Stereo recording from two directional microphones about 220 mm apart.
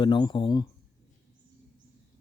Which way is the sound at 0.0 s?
20° left (ahead or behind).